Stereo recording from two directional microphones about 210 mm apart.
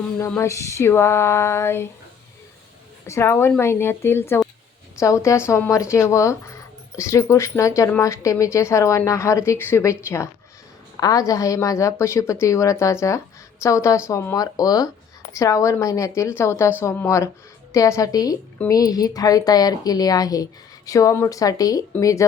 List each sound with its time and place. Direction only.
0.2 s speech: 15° left (ahead or behind)
3.1 s speech: 10° left (ahead or behind)